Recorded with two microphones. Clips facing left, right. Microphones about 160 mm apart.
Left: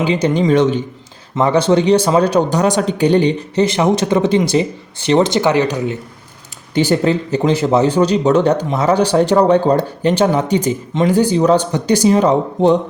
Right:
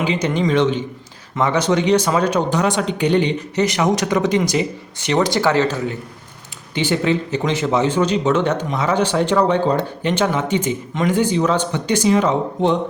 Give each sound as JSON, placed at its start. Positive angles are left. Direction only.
{"t": 0.0, "sound": "speech", "side_deg": 30}
{"t": 0.4, "sound": "a man's voice", "side_deg": 45}
{"t": 1.4, "sound": "speech", "side_deg": 30}
{"t": 6.7, "sound": "speech", "side_deg": 40}